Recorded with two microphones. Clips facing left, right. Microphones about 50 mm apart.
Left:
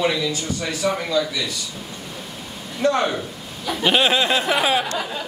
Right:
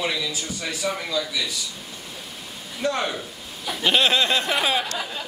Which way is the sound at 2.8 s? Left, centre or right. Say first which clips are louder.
Left 5 dB; centre.